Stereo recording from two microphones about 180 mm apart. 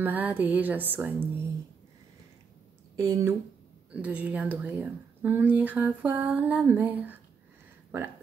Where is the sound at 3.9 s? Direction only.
5° right (ahead or behind).